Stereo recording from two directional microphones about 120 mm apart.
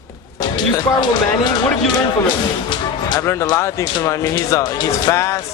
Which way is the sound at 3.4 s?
25° left (ahead or behind).